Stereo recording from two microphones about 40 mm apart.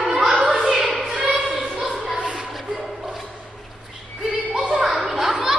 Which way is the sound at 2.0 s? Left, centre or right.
Centre.